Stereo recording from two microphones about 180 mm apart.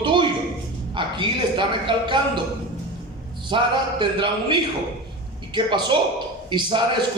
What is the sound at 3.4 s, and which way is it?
A man's voice, 25° right (ahead or behind).